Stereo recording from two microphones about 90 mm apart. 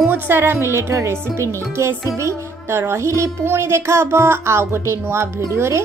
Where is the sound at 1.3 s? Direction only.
30° right (ahead or behind).